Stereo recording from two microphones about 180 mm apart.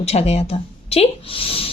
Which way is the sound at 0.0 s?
35° left (ahead or behind).